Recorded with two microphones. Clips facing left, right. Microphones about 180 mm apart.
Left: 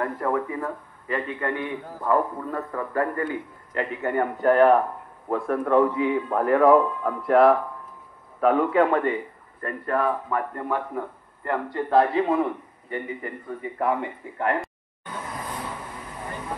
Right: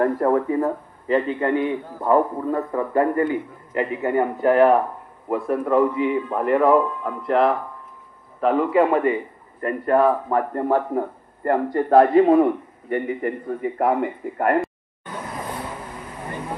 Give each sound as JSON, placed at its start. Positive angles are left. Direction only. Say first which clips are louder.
{"t": 0.0, "sound": "a man's voice", "louder": "right 7 dB", "side_deg": -35}
{"t": 3.7, "sound": "a man's voice", "louder": "right 4 dB", "side_deg": -10}
{"t": 9.6, "sound": "a man's voice", "louder": "right 7 dB", "side_deg": -25}